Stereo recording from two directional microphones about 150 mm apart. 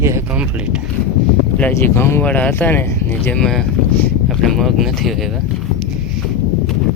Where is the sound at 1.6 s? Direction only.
15° left (ahead or behind).